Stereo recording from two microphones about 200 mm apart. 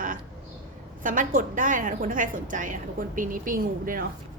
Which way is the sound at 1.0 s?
40° right (ahead or behind).